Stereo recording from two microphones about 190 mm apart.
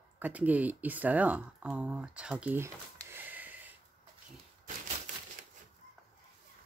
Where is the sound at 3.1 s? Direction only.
10° right (ahead or behind).